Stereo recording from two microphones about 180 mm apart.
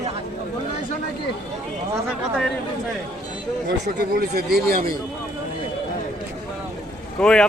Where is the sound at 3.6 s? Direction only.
60° right (ahead or behind).